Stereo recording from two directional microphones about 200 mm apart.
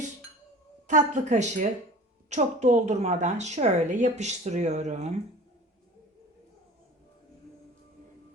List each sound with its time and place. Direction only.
0.9 s a woman's voice: 40° right (ahead or behind)